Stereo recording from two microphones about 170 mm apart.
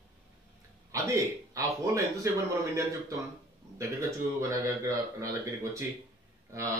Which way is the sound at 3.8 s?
15° right (ahead or behind).